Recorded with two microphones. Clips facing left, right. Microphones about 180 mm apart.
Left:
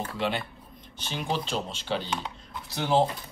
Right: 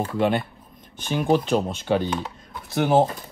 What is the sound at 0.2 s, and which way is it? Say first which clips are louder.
Speech: right 8 dB; 50° right (ahead or behind).